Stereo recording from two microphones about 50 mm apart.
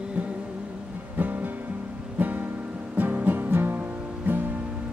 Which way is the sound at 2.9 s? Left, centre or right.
Right.